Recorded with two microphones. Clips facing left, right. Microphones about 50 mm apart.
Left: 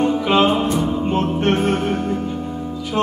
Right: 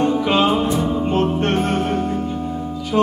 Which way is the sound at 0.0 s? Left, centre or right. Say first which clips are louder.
Left 1 dB; centre.